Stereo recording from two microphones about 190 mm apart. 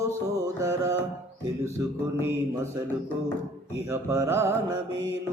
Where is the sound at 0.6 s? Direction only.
20° right (ahead or behind).